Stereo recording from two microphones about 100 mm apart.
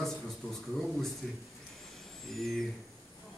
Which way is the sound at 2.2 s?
Centre (ahead or behind).